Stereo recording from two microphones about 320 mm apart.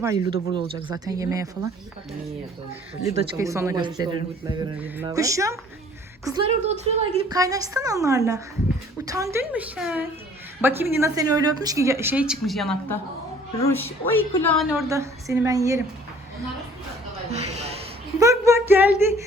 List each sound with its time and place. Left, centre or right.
0.0 s speech: centre
3.0 s a woman's voice: centre
17.3 s speech: centre
18.2 s a sound: centre